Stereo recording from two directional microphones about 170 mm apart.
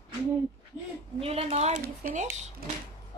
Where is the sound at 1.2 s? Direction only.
35° right (ahead or behind).